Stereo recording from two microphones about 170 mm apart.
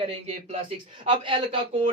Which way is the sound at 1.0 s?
30° right (ahead or behind).